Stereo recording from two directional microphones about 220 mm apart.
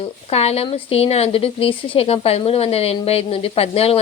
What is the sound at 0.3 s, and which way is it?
A woman's voice, 30° left (ahead or behind).